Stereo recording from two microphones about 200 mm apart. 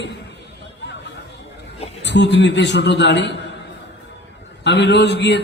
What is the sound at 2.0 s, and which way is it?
A man's voice, 60° left (ahead or behind).